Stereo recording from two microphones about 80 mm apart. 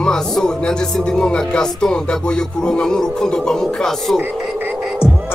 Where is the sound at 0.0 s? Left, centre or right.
Centre.